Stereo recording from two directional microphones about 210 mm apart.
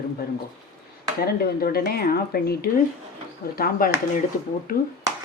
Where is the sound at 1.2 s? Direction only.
45° left (ahead or behind).